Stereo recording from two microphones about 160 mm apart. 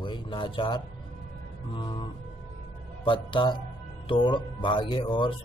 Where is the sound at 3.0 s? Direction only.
30° left (ahead or behind).